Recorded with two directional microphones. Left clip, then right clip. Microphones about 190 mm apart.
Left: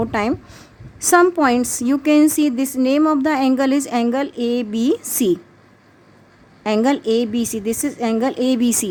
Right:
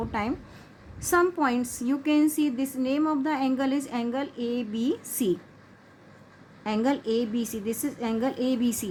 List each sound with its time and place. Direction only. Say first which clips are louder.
0.0 s a woman's voice: left 10 dB; 50° left (ahead or behind)
6.6 s a woman's voice: left 9 dB; 50° left (ahead or behind)